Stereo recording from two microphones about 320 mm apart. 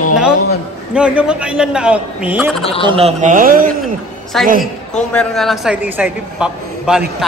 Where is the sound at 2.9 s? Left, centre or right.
Centre.